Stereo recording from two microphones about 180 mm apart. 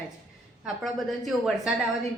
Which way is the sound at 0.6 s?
Centre (ahead or behind).